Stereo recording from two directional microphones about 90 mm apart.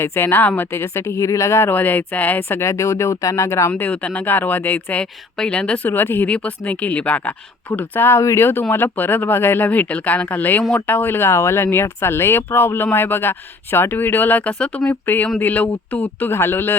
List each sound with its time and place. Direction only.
0.0 s speech: 25° left (ahead or behind)
2.6 s speech: 35° left (ahead or behind)
3.7 s speech: 15° left (ahead or behind)